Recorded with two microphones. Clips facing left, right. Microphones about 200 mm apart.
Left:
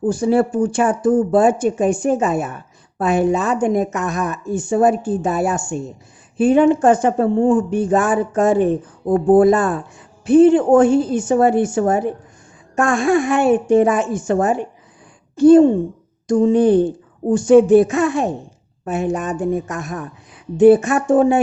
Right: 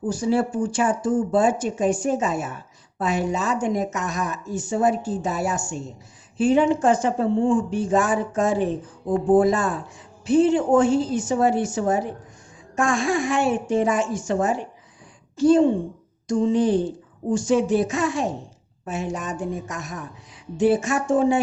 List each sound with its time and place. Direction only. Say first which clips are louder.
0.0 s a woman's voice: left 6 dB; 55° left (ahead or behind)